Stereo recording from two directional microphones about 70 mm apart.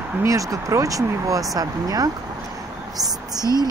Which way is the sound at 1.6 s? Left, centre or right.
Right.